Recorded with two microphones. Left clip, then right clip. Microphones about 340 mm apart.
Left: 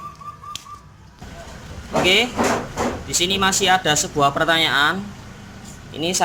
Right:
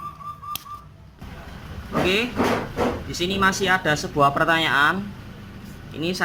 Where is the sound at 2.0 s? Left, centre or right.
Centre.